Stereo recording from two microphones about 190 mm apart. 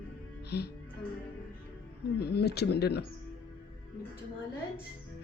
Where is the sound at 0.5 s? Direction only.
60° left (ahead or behind).